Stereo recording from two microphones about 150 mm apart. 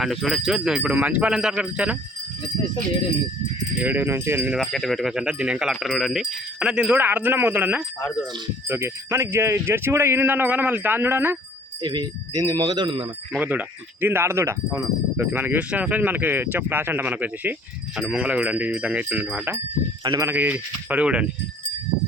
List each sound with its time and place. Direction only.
0.0 s speech: centre (ahead or behind)
3.8 s speech: 10° right (ahead or behind)
4.5 s speech: centre (ahead or behind); by 11.3 s 15° right (ahead or behind)
11.8 s speech: 30° right (ahead or behind)
13.3 s speech: 10° right (ahead or behind)
20.1 s speech: 25° right (ahead or behind)
20.3 s speech: 10° right (ahead or behind)